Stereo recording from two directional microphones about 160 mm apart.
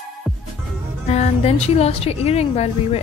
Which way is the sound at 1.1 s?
40° left (ahead or behind).